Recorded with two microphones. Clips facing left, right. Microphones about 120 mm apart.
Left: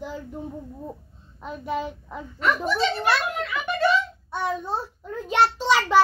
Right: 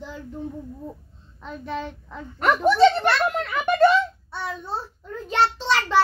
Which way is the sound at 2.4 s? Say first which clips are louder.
Right 7 dB; 50° right (ahead or behind).